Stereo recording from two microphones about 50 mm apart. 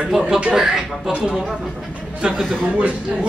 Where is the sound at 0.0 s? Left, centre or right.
Centre.